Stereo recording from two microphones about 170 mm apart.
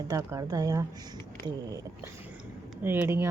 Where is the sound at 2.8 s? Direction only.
10° right (ahead or behind).